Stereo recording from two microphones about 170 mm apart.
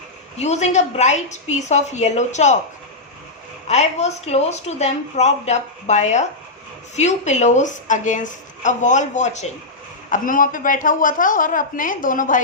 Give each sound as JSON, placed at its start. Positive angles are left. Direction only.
{"t": 0.3, "sound": "a woman's voice", "side_deg": 40}
{"t": 3.7, "sound": "a woman's voice", "side_deg": 40}